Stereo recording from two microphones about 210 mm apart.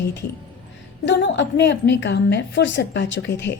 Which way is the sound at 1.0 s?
60° left (ahead or behind).